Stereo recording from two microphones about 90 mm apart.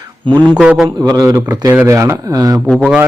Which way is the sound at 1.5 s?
45° right (ahead or behind).